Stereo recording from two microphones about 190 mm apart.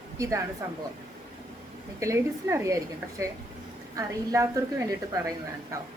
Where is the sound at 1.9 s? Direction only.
15° right (ahead or behind).